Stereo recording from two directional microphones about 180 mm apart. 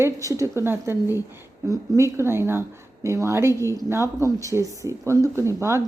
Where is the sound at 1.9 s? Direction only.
15° right (ahead or behind).